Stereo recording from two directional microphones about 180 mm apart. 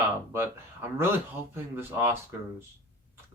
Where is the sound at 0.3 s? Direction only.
10° right (ahead or behind).